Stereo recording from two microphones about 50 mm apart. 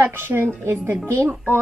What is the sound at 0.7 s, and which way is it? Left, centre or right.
Speech, right.